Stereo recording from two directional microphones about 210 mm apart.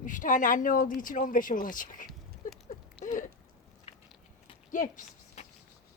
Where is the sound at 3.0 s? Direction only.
30° left (ahead or behind).